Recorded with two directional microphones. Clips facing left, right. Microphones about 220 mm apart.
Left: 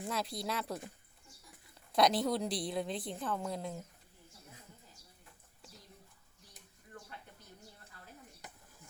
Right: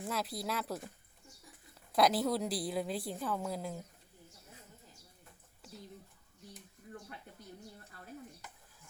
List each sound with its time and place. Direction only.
0.0 s a woman's voice: centre (ahead or behind)
1.9 s a woman's voice: 5° right (ahead or behind)